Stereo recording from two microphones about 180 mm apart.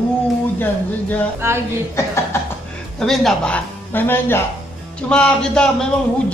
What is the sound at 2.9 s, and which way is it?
A man's voice, centre (ahead or behind).